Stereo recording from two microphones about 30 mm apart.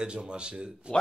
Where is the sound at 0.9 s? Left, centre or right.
Left.